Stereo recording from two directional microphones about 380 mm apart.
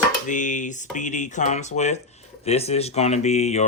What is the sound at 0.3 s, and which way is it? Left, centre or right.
Speech, centre.